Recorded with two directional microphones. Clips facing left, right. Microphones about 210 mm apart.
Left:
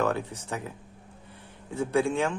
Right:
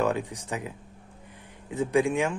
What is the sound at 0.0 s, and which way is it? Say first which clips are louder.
A man's voice: right 1 dB; 15° right (ahead or behind).